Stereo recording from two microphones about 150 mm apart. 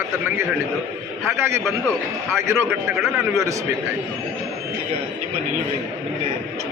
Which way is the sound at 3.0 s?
Centre (ahead or behind).